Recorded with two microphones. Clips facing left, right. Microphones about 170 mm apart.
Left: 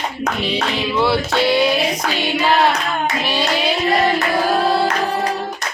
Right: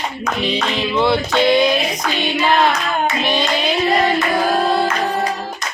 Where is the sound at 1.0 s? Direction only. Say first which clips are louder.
Right 2 dB; 5° left (ahead or behind).